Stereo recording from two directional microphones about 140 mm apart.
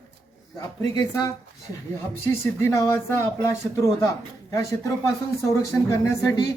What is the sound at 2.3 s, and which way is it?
A man's voice, 20° left (ahead or behind).